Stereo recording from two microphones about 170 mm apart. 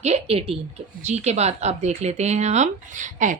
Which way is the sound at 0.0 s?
35° right (ahead or behind).